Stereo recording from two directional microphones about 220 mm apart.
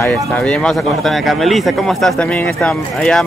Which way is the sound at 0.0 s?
5° left (ahead or behind).